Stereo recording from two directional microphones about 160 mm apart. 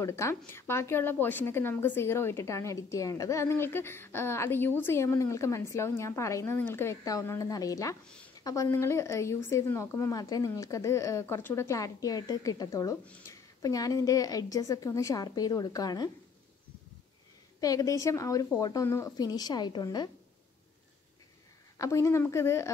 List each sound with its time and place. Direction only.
0.0 s a woman's voice: 15° left (ahead or behind)
17.6 s speech: 20° left (ahead or behind)
21.7 s speech: 20° left (ahead or behind)